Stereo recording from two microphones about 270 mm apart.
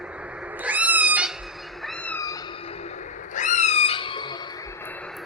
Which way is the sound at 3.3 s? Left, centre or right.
Left.